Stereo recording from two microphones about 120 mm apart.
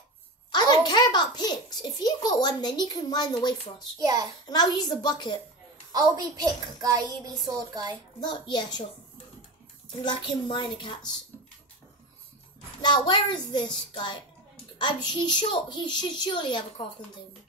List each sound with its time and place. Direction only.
0.5 s a child's voice: 35° left (ahead or behind)
4.0 s a child's voice: 35° right (ahead or behind)
4.5 s a child's voice: 35° left (ahead or behind)
5.9 s a child's voice: 30° right (ahead or behind)
8.2 s a child's voice: 35° left (ahead or behind)
10.0 s a woman's voice: 40° left (ahead or behind)
12.8 s a child's voice: 40° left (ahead or behind)